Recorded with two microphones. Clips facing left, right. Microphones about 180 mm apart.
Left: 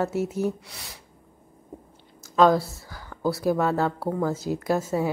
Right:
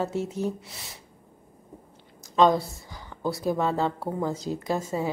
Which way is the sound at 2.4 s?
Centre (ahead or behind).